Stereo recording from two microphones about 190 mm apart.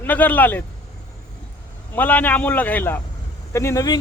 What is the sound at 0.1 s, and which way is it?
Speech, 10° left (ahead or behind).